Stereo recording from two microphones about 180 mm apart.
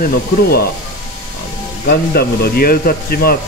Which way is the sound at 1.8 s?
60° left (ahead or behind).